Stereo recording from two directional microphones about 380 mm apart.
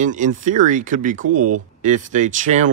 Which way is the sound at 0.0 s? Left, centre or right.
Centre.